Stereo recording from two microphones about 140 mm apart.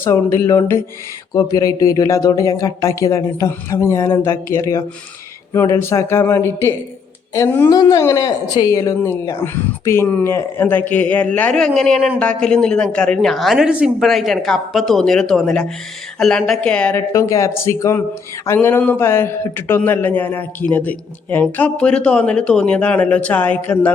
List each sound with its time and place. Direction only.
0.0 s speech: 20° left (ahead or behind)
17.1 s speech: 20° left (ahead or behind)